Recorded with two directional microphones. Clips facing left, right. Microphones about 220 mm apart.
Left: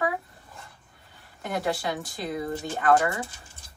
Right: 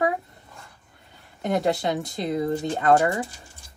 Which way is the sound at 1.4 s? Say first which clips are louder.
Right 5 dB; 20° right (ahead or behind).